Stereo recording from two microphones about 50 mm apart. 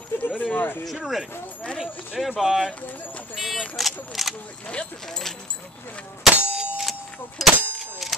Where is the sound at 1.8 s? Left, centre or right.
Centre.